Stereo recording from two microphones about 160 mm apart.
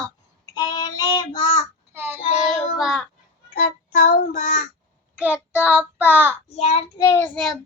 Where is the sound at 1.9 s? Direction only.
15° right (ahead or behind).